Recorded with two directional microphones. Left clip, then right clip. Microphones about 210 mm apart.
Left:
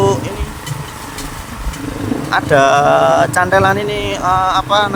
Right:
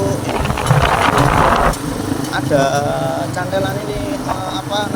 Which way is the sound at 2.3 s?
35° left (ahead or behind).